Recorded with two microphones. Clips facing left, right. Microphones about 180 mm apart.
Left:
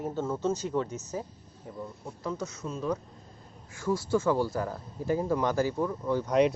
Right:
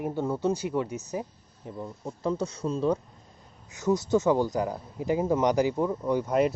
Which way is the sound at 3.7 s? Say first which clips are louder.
Right 4 dB; 20° right (ahead or behind).